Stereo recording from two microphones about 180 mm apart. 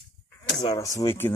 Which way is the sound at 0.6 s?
20° left (ahead or behind).